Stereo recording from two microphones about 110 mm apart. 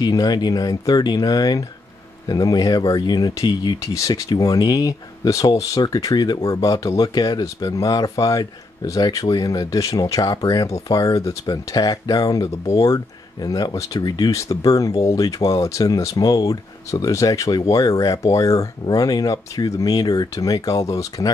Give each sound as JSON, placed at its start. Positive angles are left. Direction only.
{"t": 0.0, "sound": "speech", "side_deg": 40}